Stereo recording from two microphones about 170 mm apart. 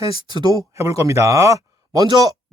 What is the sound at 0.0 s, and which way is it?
Speech, 25° right (ahead or behind).